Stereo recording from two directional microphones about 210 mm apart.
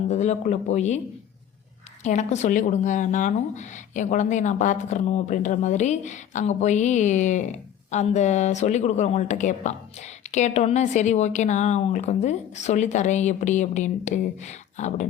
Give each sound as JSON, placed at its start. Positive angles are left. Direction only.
{"t": 0.1, "sound": "speech", "side_deg": 35}
{"t": 2.0, "sound": "speech", "side_deg": 35}